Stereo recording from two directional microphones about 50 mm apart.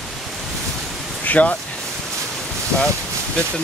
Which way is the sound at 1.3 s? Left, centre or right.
Left.